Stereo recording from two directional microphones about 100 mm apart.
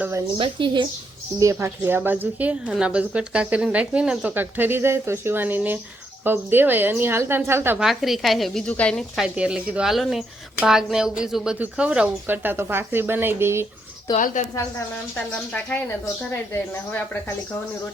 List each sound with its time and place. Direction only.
0.3 s a woman's voice: 60° right (ahead or behind)
1.4 s speech: 30° right (ahead or behind)
7.8 s speech: centre (ahead or behind)
8.6 s speech: 10° left (ahead or behind)
9.0 s speech: centre (ahead or behind); by 13.7 s 25° right (ahead or behind)
15.1 s speech: 15° left (ahead or behind)